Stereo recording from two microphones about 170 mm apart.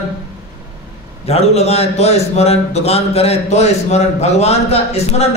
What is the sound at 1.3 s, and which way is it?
A man's voice, 40° left (ahead or behind).